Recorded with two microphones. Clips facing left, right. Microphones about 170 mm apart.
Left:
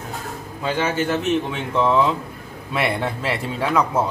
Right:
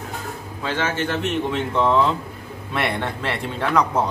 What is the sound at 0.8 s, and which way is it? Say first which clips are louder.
A man's voice: left 2 dB; centre (ahead or behind).